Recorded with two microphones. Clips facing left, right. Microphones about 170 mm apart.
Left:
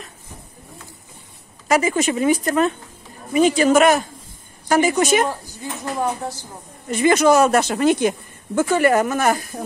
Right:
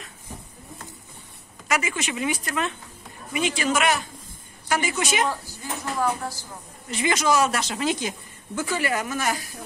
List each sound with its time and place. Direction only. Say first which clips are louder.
1.7 s speech: left 9 dB; 35° left (ahead or behind)
5.5 s speech: left 3 dB; 20° left (ahead or behind)
6.9 s speech: left 8 dB; 50° left (ahead or behind)